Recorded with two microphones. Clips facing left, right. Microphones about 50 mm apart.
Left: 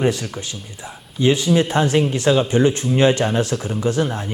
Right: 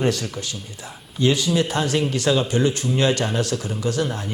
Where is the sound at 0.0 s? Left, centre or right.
Centre.